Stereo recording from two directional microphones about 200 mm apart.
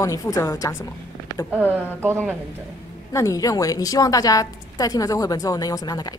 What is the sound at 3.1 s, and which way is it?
A woman's voice, 15° left (ahead or behind).